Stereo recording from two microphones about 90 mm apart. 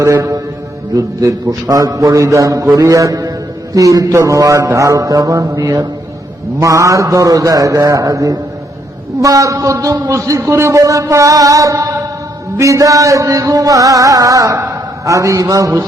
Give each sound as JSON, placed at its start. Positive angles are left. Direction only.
{"t": 0.2, "sound": "mantra", "side_deg": -40}
{"t": 0.9, "sound": "a man's voice", "side_deg": -40}